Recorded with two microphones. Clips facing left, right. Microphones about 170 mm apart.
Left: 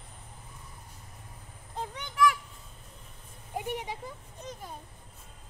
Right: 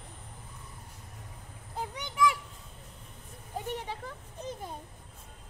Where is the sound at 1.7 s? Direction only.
15° right (ahead or behind).